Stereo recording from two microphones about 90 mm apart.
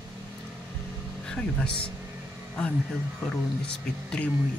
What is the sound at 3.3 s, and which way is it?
Speech, 10° left (ahead or behind).